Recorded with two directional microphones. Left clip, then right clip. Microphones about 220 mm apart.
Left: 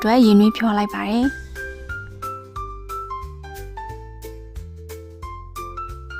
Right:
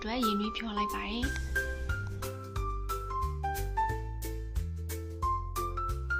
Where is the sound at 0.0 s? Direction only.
55° left (ahead or behind).